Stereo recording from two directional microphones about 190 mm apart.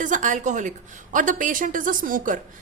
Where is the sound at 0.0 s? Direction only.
40° right (ahead or behind).